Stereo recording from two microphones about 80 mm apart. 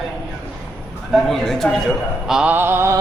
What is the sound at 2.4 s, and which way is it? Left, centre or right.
Mantra, right.